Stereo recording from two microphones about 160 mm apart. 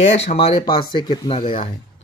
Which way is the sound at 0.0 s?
45° left (ahead or behind).